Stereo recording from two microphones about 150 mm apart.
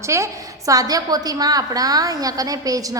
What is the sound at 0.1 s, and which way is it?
A woman's voice, 20° right (ahead or behind).